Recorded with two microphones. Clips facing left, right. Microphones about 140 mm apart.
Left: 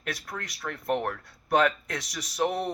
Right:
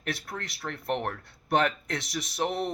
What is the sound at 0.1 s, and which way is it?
Speech, 25° right (ahead or behind).